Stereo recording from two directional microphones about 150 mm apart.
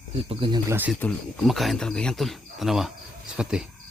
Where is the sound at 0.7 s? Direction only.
10° right (ahead or behind).